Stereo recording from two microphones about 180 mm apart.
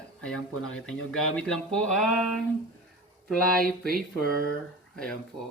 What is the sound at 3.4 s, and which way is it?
Mantra, 55° right (ahead or behind).